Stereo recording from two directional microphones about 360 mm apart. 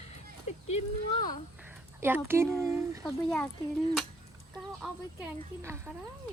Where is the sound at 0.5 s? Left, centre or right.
Centre.